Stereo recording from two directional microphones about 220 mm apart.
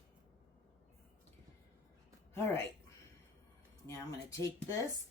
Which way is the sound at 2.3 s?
10° left (ahead or behind).